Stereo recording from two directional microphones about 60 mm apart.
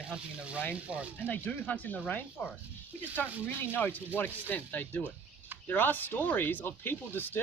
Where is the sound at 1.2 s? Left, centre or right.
Left.